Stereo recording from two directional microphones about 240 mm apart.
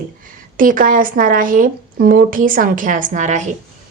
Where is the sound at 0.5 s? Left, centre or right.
Right.